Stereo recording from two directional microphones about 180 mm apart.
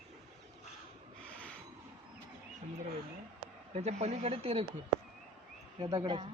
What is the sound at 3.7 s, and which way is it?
Speech, 35° right (ahead or behind).